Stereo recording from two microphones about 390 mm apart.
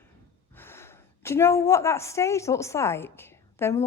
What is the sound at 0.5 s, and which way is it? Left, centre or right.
A woman's voice, centre.